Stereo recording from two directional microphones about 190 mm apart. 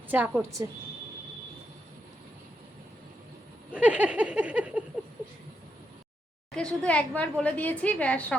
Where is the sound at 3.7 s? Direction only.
5° right (ahead or behind).